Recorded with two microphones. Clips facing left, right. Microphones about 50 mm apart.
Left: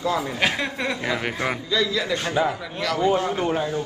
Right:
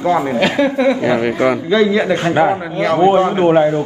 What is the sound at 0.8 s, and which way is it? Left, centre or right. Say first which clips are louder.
A man's voice: right 11 dB; right.